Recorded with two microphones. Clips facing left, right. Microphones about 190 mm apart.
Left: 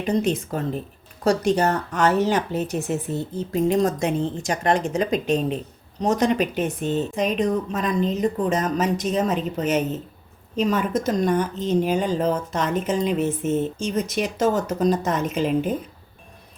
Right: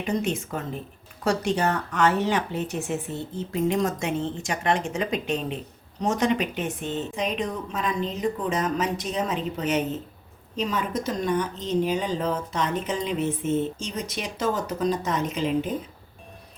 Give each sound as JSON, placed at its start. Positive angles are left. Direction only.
{"t": 0.0, "sound": "a woman's voice", "side_deg": 35}